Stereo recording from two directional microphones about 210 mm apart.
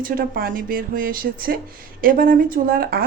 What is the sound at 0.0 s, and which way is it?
Speech, 45° right (ahead or behind).